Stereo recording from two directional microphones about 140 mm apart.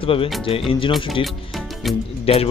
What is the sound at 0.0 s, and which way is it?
Speech, 40° left (ahead or behind).